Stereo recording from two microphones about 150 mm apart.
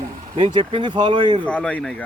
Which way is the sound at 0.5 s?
30° right (ahead or behind).